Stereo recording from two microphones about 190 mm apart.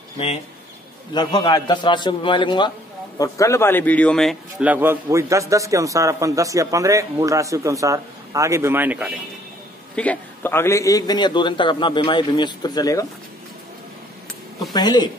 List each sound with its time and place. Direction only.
1.1 s a man's voice: 25° left (ahead or behind); by 9.2 s 5° right (ahead or behind)
9.9 s a man's voice: 10° left (ahead or behind)
14.7 s speech: 20° left (ahead or behind)